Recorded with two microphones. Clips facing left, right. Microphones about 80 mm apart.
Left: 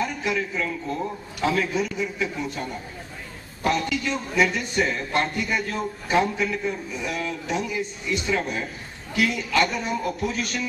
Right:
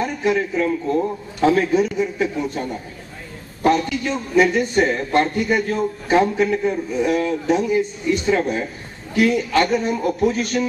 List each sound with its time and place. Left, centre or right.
0.0 s a man's voice: right
3.6 s a man's voice: right